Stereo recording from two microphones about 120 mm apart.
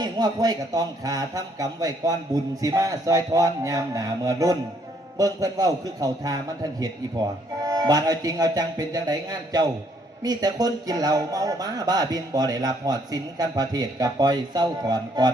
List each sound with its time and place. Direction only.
0.0 s a man's voice: 30° right (ahead or behind)